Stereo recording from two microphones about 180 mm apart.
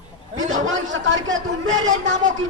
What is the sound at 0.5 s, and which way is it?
Speech, 90° right.